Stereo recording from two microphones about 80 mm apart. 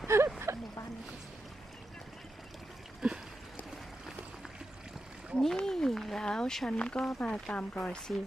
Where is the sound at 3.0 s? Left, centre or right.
Centre.